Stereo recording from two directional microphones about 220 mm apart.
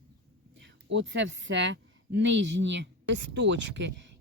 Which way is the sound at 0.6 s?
55° right (ahead or behind).